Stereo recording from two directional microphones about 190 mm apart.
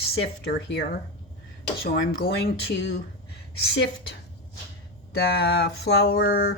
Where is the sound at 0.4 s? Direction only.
55° left (ahead or behind).